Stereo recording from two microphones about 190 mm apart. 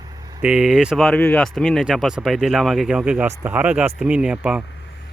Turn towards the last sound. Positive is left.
turn(degrees=-5)  # may be behind; listen again after turning